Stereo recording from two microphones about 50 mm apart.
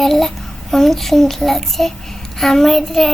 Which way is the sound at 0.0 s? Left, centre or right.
Centre.